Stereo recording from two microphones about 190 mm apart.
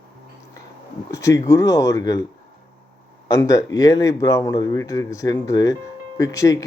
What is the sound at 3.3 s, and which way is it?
Speech, 15° left (ahead or behind).